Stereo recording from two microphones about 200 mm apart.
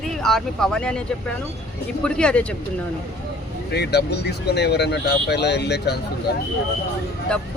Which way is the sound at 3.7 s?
55° left (ahead or behind).